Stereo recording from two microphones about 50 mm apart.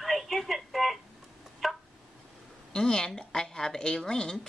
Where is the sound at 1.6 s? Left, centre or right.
Centre.